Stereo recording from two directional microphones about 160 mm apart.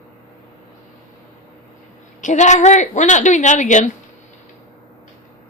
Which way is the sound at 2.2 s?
50° left (ahead or behind).